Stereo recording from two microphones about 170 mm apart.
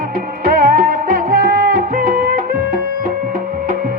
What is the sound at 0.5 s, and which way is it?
Music, 55° right (ahead or behind).